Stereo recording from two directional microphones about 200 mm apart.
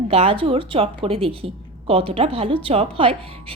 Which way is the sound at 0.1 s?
30° right (ahead or behind).